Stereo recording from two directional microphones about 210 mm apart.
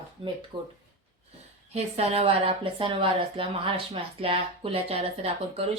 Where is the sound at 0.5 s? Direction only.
20° right (ahead or behind).